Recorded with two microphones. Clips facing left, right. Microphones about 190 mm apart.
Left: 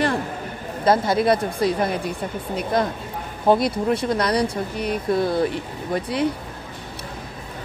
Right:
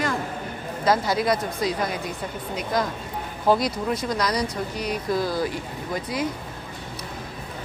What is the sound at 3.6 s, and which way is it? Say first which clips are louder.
Speech: left 4 dB; 60° left (ahead or behind).